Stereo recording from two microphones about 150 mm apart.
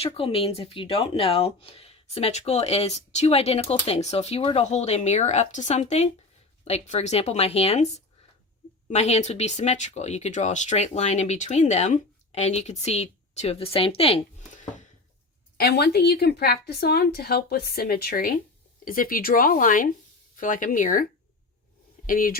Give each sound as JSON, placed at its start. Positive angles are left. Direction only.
{"t": 0.0, "sound": "speech", "side_deg": 40}
{"t": 15.5, "sound": "a woman's voice", "side_deg": 90}